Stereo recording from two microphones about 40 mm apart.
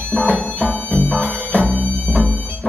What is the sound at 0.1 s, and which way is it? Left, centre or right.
Music, left.